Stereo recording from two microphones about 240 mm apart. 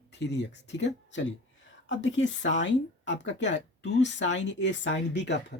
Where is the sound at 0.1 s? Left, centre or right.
Left.